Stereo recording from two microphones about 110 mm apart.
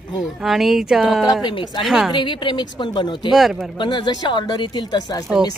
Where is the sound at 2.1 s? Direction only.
45° left (ahead or behind).